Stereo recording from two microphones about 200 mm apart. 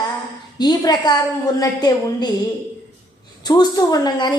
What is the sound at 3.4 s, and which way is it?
Speech, 20° left (ahead or behind).